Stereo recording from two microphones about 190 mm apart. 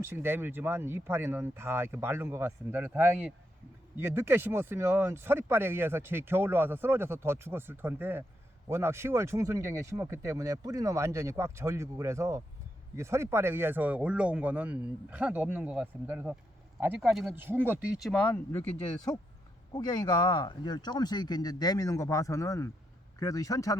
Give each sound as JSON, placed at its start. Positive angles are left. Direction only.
{"t": 0.0, "sound": "speech", "side_deg": -10}
{"t": 17.3, "sound": "speech", "side_deg": -10}
{"t": 19.7, "sound": "a man's voice", "side_deg": 20}